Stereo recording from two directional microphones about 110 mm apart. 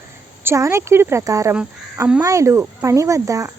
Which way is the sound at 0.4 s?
25° right (ahead or behind).